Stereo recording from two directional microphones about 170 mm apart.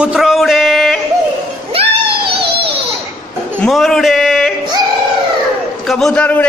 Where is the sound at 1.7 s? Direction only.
35° right (ahead or behind).